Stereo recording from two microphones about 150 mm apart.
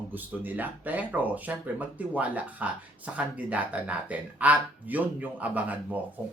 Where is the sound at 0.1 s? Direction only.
10° right (ahead or behind).